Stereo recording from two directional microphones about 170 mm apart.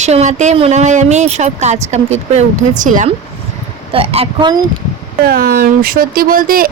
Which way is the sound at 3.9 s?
35° right (ahead or behind).